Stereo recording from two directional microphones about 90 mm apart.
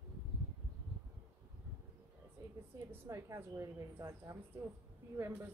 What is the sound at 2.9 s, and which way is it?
A woman's voice, 30° right (ahead or behind).